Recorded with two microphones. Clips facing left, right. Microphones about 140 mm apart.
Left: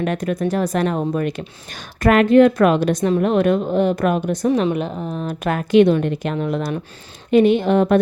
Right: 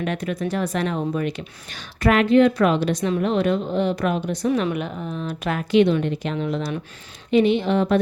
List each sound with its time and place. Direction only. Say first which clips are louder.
0.0 s speech: left 4 dB; 45° left (ahead or behind)